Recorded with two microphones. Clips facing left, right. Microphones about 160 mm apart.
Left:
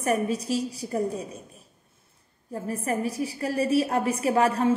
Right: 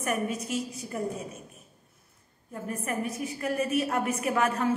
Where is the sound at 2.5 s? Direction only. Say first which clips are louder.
Left 4 dB; 35° left (ahead or behind).